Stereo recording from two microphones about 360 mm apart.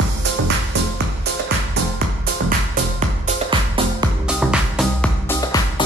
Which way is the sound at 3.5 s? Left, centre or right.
Centre.